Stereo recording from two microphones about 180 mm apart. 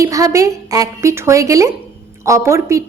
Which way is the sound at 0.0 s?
20° right (ahead or behind).